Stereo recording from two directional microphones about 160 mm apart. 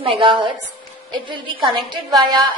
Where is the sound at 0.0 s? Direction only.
30° right (ahead or behind).